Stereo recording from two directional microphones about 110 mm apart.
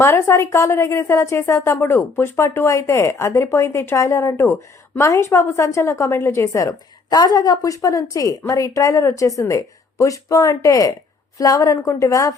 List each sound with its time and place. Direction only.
0.0 s a woman's voice: 20° left (ahead or behind)